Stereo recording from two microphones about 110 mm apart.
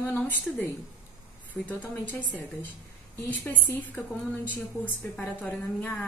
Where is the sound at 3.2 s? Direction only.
15° left (ahead or behind).